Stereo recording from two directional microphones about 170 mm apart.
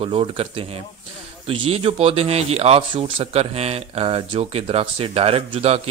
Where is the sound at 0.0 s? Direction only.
35° right (ahead or behind).